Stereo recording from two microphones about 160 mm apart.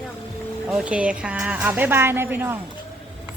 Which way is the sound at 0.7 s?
10° right (ahead or behind).